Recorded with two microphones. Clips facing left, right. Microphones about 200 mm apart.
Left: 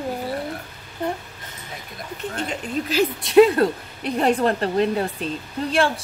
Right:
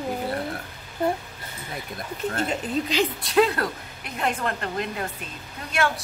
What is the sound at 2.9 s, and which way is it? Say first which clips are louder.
Speech: left 3 dB; 5° left (ahead or behind).